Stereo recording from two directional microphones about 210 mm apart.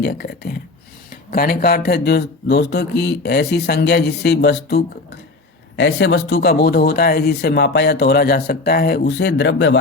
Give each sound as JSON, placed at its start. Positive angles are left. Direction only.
{"t": 0.0, "sound": "speech", "side_deg": 50}